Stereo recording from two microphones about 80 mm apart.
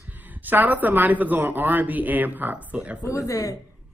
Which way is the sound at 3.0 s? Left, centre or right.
Left.